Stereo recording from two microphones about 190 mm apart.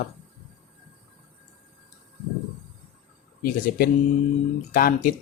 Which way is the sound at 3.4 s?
50° left (ahead or behind).